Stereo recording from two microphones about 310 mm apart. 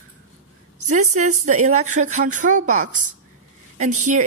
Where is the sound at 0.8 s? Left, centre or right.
Right.